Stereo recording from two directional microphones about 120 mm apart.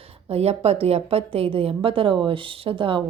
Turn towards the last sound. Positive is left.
turn(degrees=-45)  # may be behind; listen again after turning